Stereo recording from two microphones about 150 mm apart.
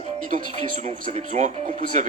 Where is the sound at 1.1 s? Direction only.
50° right (ahead or behind).